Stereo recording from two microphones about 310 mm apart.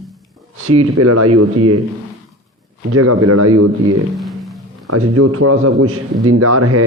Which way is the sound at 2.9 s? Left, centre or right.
Right.